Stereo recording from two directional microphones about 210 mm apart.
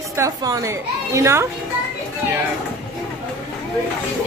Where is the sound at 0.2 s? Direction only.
15° right (ahead or behind).